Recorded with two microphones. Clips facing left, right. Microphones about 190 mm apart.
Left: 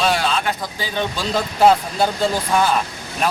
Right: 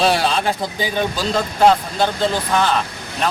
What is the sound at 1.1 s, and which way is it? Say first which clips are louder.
Speech: right 1 dB; centre (ahead or behind).